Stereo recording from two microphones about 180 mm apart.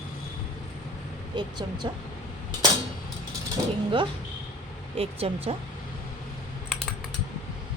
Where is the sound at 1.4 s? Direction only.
25° right (ahead or behind).